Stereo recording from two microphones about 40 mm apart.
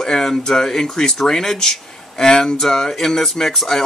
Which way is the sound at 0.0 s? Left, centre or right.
Centre.